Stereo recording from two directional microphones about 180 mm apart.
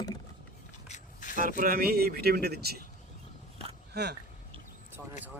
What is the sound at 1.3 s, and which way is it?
Speech, 50° right (ahead or behind).